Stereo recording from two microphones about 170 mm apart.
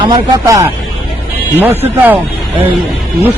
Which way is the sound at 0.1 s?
20° right (ahead or behind).